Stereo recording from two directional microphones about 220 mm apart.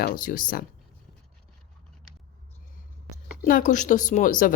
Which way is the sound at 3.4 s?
35° left (ahead or behind).